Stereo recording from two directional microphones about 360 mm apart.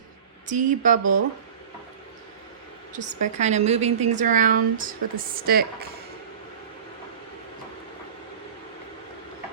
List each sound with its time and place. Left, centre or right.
0.5 s a woman's voice: right
2.9 s a woman's voice: centre